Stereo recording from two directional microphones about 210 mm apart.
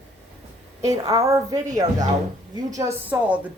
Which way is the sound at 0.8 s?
15° right (ahead or behind).